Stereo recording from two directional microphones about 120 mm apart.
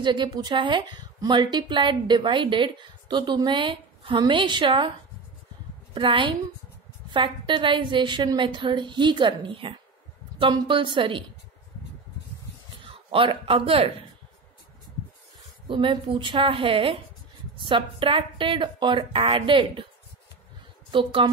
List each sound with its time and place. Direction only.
0.0 s a woman's voice: 40° right (ahead or behind)
5.9 s a woman's voice: 45° right (ahead or behind)
12.8 s speech: 45° right (ahead or behind)
15.7 s a woman's voice: 45° right (ahead or behind)
20.9 s a woman's voice: 45° right (ahead or behind)